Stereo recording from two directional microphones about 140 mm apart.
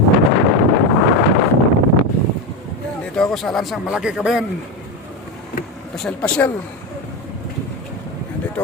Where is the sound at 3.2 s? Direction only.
Centre (ahead or behind).